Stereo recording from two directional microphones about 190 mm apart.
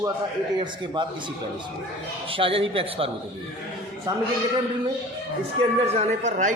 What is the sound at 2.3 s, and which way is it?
Speech, 30° right (ahead or behind).